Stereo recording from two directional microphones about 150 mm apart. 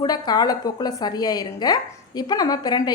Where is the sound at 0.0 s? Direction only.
25° left (ahead or behind).